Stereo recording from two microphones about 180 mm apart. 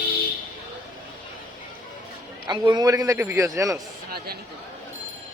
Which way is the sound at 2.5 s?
20° right (ahead or behind).